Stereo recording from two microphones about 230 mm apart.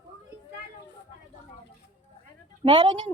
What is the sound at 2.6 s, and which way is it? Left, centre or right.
Speech, right.